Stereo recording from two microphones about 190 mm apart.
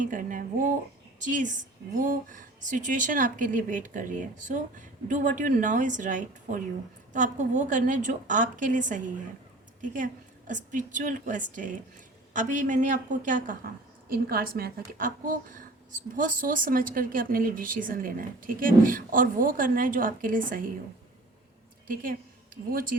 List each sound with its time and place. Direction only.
0.0 s a woman's voice: 45° right (ahead or behind)
22.7 s a woman's voice: 45° right (ahead or behind)